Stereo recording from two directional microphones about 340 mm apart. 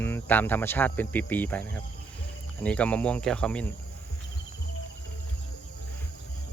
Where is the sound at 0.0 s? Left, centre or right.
Centre.